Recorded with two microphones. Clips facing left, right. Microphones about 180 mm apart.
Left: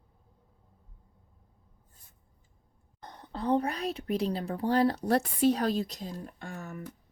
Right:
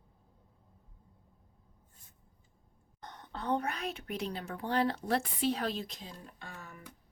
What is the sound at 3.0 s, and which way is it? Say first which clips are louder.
Speech: left 5 dB; 35° left (ahead or behind).